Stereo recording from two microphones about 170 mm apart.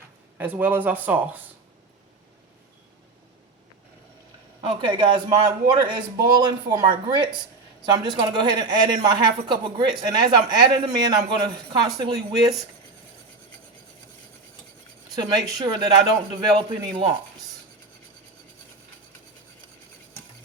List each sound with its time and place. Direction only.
0.3 s speech: 10° right (ahead or behind)
4.6 s a man's voice: 25° right (ahead or behind)
15.1 s a man's voice: 25° right (ahead or behind)